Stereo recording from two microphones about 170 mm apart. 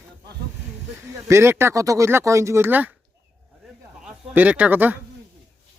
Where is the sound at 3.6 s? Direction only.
5° right (ahead or behind).